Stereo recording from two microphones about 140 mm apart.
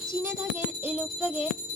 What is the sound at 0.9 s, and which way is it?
Jingle bell, 15° right (ahead or behind).